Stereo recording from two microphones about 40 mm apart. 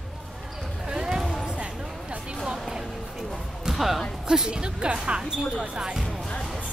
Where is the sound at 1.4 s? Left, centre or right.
Right.